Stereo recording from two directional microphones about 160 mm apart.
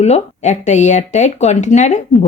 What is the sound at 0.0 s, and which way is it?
A woman's voice, 45° left (ahead or behind).